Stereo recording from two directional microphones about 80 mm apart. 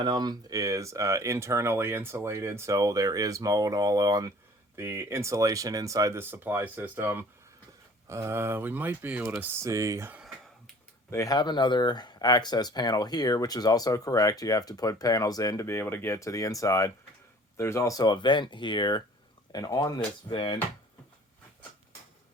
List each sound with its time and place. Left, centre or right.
0.0 s speech: right
0.6 s speech: right
4.8 s speech: right
6.1 s speech: right
8.0 s speech: right
9.6 s speech: right
11.3 s speech: left
15.6 s speech: left
18.0 s speech: left
19.5 s speech: left